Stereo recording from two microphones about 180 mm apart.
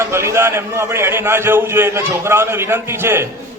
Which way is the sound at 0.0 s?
15° right (ahead or behind).